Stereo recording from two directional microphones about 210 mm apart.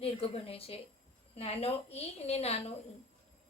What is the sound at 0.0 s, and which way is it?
A woman's voice, 25° left (ahead or behind).